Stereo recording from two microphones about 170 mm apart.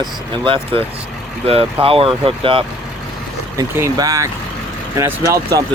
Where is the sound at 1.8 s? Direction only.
30° right (ahead or behind).